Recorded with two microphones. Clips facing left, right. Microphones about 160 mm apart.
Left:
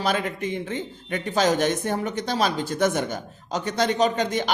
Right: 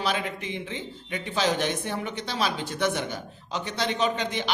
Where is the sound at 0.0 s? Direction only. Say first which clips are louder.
Left 4 dB; 45° left (ahead or behind).